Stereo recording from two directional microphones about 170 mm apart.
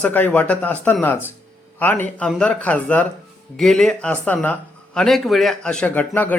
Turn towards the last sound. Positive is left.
turn(degrees=10)  # may be behind; listen again after turning